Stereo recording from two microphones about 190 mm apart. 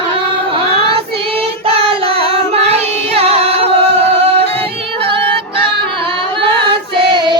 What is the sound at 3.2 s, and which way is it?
Carnatic music, 30° right (ahead or behind).